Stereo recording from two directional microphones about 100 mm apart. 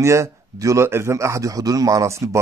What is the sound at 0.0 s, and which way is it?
A man's voice, 30° right (ahead or behind).